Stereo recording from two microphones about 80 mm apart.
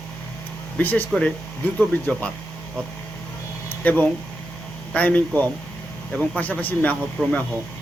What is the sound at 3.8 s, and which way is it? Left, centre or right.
Speech, left.